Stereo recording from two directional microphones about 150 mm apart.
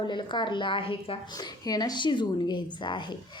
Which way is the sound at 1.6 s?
25° left (ahead or behind).